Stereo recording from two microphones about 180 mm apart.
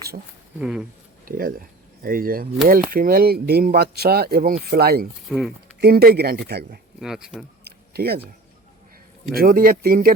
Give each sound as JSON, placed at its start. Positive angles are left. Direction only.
{"t": 0.6, "sound": "speech", "side_deg": -5}
{"t": 1.2, "sound": "speech", "side_deg": -50}
{"t": 5.3, "sound": "speech", "side_deg": 0}
{"t": 5.8, "sound": "speech", "side_deg": -60}
{"t": 7.0, "sound": "speech", "side_deg": -5}
{"t": 7.6, "sound": "a sound", "side_deg": -60}
{"t": 9.3, "sound": "speech", "side_deg": -55}